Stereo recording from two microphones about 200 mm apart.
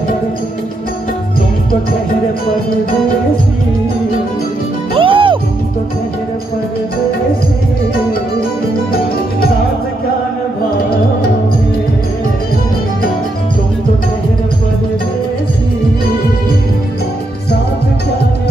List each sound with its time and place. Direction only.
4.9 s music: 25° right (ahead or behind)